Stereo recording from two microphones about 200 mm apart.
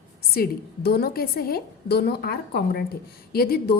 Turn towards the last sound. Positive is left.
turn(degrees=50)  # may be behind; listen again after turning